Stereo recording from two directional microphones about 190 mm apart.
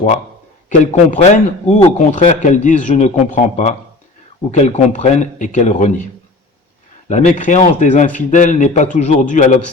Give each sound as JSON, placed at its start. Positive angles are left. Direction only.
{"t": 0.9, "sound": "a man's voice", "side_deg": 40}
{"t": 7.1, "sound": "a man's voice", "side_deg": 40}